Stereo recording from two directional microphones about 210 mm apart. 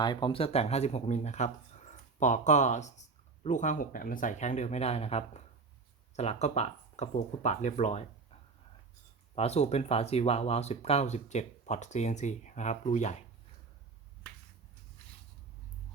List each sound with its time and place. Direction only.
0.0 s speech: 20° left (ahead or behind)